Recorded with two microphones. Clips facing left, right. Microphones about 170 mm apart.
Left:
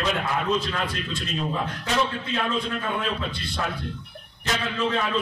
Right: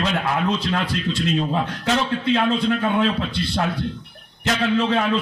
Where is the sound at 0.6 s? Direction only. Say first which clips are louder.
Right 6 dB; 75° right (ahead or behind).